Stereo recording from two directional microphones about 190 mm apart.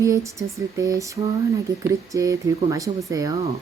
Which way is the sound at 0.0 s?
15° right (ahead or behind).